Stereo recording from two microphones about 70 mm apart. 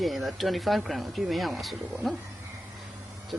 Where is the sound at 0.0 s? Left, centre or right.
Centre.